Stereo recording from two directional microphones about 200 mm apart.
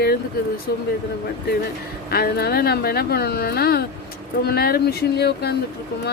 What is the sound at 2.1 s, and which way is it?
Speech, 50° left (ahead or behind).